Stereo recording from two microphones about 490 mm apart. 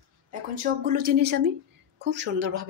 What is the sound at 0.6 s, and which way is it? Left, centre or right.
A woman's voice, centre.